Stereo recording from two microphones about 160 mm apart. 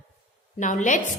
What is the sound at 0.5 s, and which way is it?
Speech, 50° left (ahead or behind).